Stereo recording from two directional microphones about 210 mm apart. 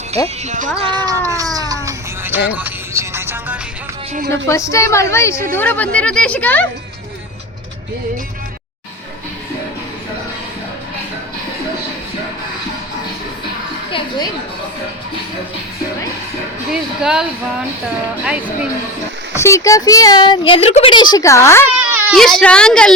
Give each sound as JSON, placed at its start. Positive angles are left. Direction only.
{"t": 0.4, "sound": "speech", "side_deg": -35}
{"t": 0.8, "sound": "speech", "side_deg": -20}
{"t": 1.5, "sound": "a sound", "side_deg": -15}
{"t": 2.5, "sound": "music", "side_deg": -10}
{"t": 4.3, "sound": "a woman's voice", "side_deg": 15}
{"t": 17.0, "sound": "a woman's voice", "side_deg": -5}
{"t": 19.4, "sound": "a woman's voice", "side_deg": 15}
{"t": 21.7, "sound": "baby cry", "side_deg": -10}
{"t": 22.2, "sound": "a woman's voice", "side_deg": 5}